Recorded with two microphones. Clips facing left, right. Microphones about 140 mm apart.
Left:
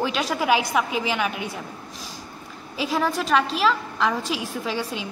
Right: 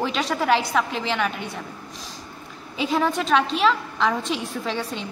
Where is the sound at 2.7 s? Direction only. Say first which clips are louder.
Right 1 dB; centre (ahead or behind).